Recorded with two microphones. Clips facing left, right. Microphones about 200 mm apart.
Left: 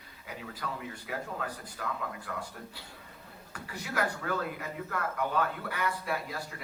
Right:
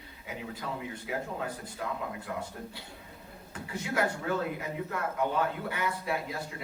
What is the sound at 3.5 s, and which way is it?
A man's voice, 25° right (ahead or behind).